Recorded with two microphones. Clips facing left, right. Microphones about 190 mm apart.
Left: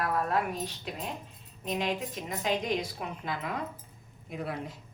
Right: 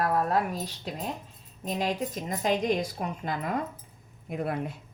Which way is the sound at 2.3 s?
45° right (ahead or behind).